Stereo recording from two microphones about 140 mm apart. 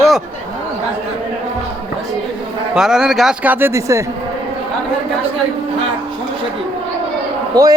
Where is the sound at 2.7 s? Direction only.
5° right (ahead or behind); by 4.0 s 20° right (ahead or behind).